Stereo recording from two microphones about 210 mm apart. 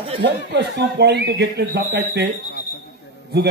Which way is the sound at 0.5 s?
55° right (ahead or behind).